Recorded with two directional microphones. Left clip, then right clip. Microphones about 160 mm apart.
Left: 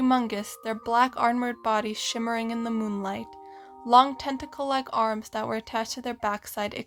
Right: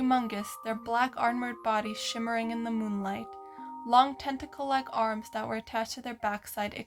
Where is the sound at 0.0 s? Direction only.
45° left (ahead or behind).